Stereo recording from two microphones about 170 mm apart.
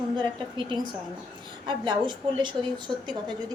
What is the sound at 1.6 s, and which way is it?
Speech, 25° right (ahead or behind).